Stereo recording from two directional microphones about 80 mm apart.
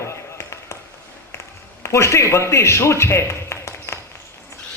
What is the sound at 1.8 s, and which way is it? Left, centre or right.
A man's voice, left.